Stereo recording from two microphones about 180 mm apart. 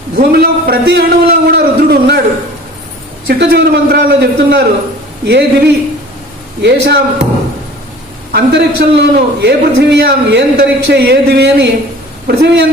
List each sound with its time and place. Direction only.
0.2 s a man's voice: 60° right (ahead or behind)
3.2 s a man's voice: 60° right (ahead or behind)
8.3 s a man's voice: 65° right (ahead or behind)